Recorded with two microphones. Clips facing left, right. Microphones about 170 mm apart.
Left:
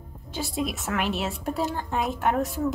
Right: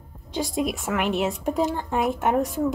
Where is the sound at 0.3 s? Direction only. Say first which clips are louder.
Right 4 dB; 15° right (ahead or behind).